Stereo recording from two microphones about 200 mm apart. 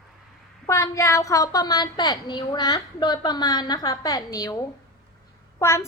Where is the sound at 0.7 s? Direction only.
15° left (ahead or behind).